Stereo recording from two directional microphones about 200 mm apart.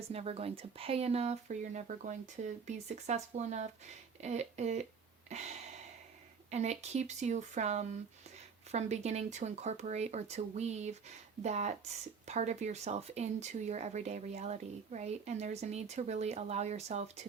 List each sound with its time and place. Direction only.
0.1 s speech: 30° right (ahead or behind)
5.3 s a sound: 35° right (ahead or behind)
6.5 s speech: 35° right (ahead or behind)